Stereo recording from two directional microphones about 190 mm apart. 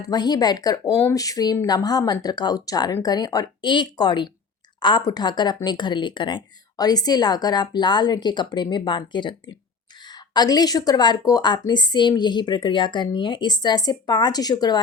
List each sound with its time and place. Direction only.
0.0 s a woman's voice: 20° left (ahead or behind)